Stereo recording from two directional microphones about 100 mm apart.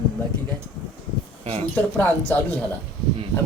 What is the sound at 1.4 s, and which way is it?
Speech, 90° right.